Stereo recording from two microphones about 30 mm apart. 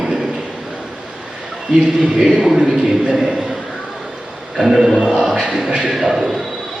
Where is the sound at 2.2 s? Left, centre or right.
Centre.